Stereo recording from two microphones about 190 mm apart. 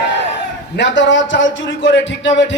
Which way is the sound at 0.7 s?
70° left (ahead or behind).